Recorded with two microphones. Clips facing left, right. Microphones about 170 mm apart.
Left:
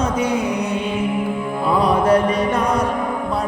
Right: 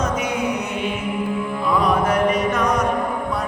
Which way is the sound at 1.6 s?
35° left (ahead or behind).